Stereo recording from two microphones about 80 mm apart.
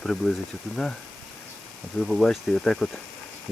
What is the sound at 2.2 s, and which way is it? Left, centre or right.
Speech, centre.